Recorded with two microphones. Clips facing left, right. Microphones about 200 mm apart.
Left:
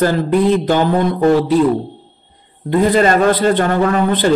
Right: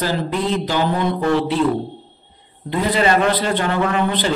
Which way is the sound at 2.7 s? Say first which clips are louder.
Left 5 dB; 45° left (ahead or behind).